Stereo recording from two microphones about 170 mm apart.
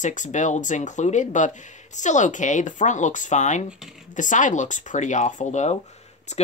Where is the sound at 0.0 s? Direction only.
45° left (ahead or behind).